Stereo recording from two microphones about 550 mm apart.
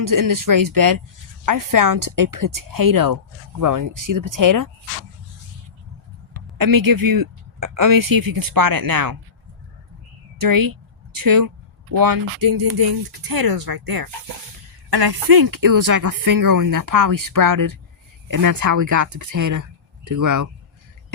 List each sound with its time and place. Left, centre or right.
0.0 s speech: right
6.6 s speech: right
10.4 s speech: right